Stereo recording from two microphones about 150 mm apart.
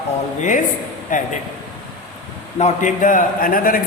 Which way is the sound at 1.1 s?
60° left (ahead or behind).